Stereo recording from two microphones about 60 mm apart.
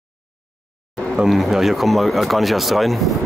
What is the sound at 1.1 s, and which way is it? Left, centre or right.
Speech, centre.